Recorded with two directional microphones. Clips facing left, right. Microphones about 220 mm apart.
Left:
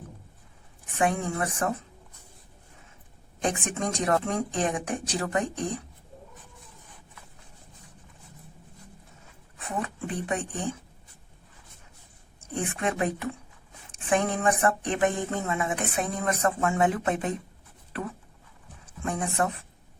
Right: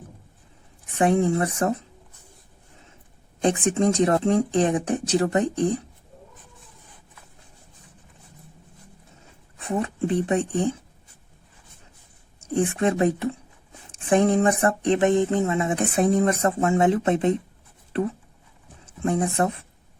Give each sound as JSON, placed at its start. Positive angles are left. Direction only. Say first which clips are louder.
{"t": 0.9, "sound": "speech", "louder": "right 7 dB", "side_deg": -35}
{"t": 3.4, "sound": "speech", "louder": "right 8 dB", "side_deg": -30}
{"t": 9.6, "sound": "speech", "louder": "right 8 dB", "side_deg": -25}
{"t": 12.5, "sound": "speech", "louder": "right 7 dB", "side_deg": -30}
{"t": 19.1, "sound": "speech", "louder": "right 5 dB", "side_deg": -30}